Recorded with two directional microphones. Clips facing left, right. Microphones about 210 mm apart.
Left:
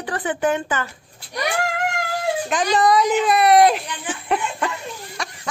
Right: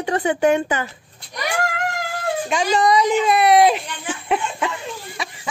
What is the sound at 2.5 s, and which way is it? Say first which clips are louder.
Speech: right 1 dB; centre (ahead or behind).